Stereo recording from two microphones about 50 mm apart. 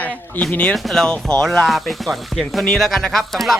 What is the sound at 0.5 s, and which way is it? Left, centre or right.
Speech, left.